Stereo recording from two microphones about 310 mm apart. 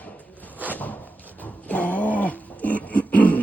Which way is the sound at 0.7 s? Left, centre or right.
Centre.